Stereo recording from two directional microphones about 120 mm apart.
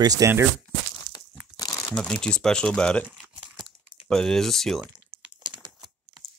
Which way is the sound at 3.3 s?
Centre (ahead or behind).